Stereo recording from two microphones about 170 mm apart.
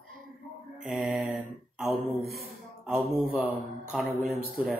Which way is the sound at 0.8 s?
5° right (ahead or behind).